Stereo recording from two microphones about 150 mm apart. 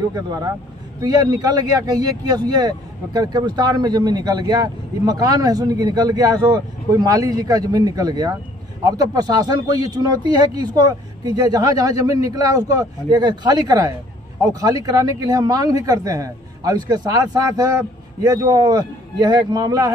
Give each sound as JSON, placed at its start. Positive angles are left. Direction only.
{"t": 0.1, "sound": "speech", "side_deg": -25}